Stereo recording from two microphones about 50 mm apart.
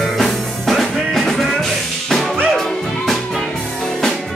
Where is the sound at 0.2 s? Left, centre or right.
Centre.